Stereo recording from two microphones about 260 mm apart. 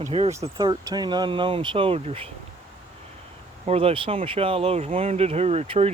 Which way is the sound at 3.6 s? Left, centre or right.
Right.